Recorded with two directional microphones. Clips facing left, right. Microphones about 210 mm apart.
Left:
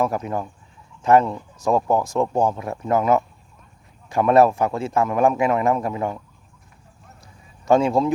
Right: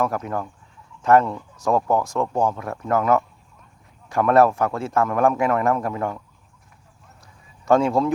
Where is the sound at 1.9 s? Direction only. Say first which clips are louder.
Left 1 dB; 5° left (ahead or behind).